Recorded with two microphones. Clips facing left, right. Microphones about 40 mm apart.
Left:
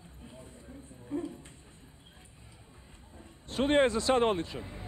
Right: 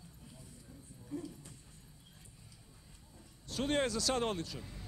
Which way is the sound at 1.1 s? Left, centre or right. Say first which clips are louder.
Left 7 dB; left.